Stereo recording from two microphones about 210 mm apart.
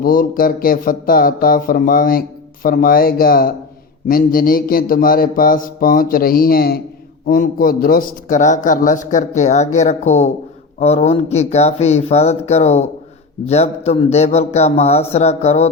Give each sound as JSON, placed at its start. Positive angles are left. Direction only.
{"t": 0.0, "sound": "a man's voice", "side_deg": 40}